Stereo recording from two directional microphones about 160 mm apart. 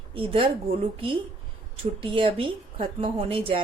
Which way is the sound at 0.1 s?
35° right (ahead or behind).